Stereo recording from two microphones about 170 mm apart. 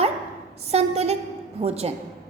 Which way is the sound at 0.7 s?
40° right (ahead or behind).